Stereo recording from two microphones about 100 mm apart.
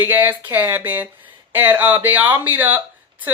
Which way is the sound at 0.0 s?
20° right (ahead or behind).